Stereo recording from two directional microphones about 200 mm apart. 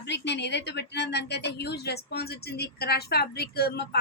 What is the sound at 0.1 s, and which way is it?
Speech, 60° left (ahead or behind).